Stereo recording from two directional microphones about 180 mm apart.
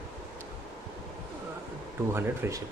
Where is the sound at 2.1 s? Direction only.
15° right (ahead or behind).